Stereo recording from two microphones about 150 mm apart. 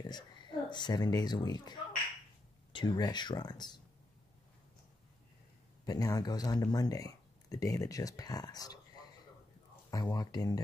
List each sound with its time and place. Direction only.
0.0 s speech: 30° left (ahead or behind)
5.9 s speech: 25° left (ahead or behind)
9.8 s speech: 25° left (ahead or behind)